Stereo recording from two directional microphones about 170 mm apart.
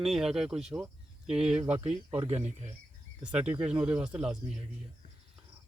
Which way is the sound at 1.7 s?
35° right (ahead or behind).